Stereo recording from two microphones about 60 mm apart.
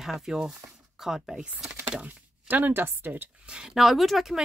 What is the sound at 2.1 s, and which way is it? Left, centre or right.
Speech, right.